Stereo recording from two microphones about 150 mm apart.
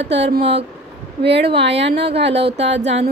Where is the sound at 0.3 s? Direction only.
40° right (ahead or behind).